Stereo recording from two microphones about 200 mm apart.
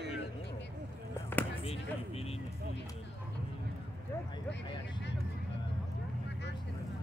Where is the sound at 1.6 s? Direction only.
30° left (ahead or behind).